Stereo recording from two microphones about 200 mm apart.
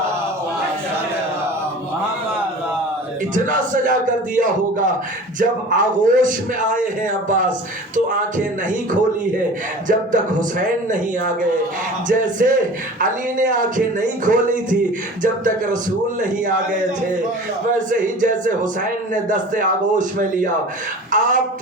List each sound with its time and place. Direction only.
3.3 s a man's voice: 40° right (ahead or behind)
9.8 s a man's voice: 40° right (ahead or behind)
12.0 s a man's voice: 40° right (ahead or behind)
17.7 s a man's voice: 40° right (ahead or behind)